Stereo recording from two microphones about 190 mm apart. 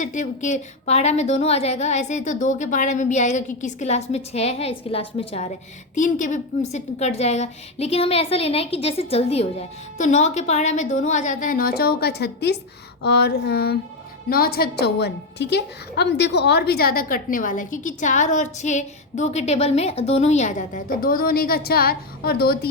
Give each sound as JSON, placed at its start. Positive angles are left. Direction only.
{"t": 0.0, "sound": "a woman's voice", "side_deg": 40}
{"t": 5.9, "sound": "a woman's voice", "side_deg": 40}
{"t": 13.0, "sound": "a sound", "side_deg": 60}
{"t": 14.3, "sound": "a woman's voice", "side_deg": 50}